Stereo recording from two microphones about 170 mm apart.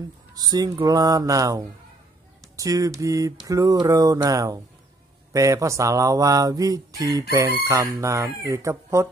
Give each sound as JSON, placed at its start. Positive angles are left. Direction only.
{"t": 0.4, "sound": "speech", "side_deg": -20}